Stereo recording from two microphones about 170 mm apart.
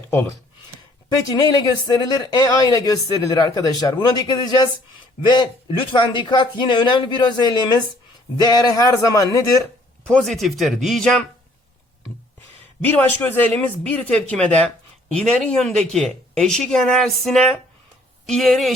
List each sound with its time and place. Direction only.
1.1 s speech: 25° left (ahead or behind)
10.1 s speech: centre (ahead or behind)
12.8 s a man's voice: 10° left (ahead or behind)